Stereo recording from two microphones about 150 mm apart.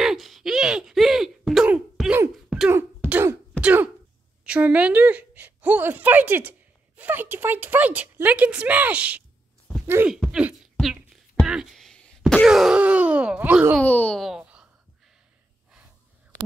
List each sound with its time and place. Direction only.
0.0 s a sound: centre (ahead or behind)
2.3 s throat clearing: 5° right (ahead or behind)
4.5 s a woman's voice: 10° right (ahead or behind)
10.1 s beatboxing: 5° right (ahead or behind)
11.4 s speech: 5° right (ahead or behind)
13.7 s speech: 10° left (ahead or behind)
14.4 s a sound: 10° right (ahead or behind)